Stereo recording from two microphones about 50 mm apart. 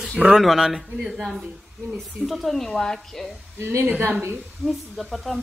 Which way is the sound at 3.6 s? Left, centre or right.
Right.